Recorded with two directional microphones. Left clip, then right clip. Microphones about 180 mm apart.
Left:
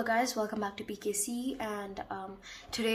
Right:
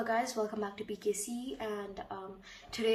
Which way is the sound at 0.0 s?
25° left (ahead or behind).